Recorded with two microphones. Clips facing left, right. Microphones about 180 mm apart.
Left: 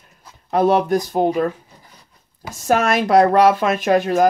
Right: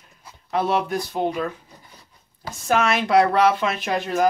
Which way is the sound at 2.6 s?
45° left (ahead or behind).